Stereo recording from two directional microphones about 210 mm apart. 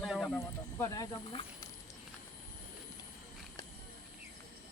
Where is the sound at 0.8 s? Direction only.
15° left (ahead or behind).